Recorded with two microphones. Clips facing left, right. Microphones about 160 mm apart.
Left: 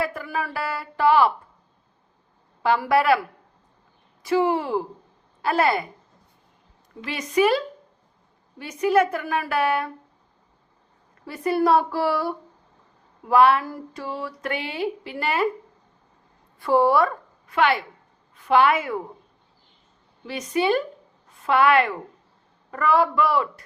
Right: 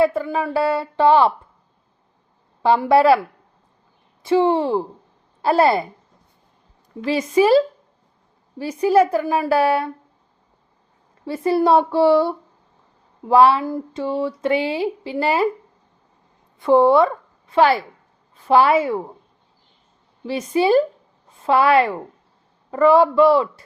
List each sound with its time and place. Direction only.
0.0 s speech: 25° right (ahead or behind)
2.6 s speech: 25° right (ahead or behind)
4.2 s a woman's voice: 25° right (ahead or behind)
7.0 s a woman's voice: 30° right (ahead or behind)
11.3 s speech: 30° right (ahead or behind)
16.6 s a woman's voice: 20° right (ahead or behind)
20.2 s a woman's voice: 30° right (ahead or behind)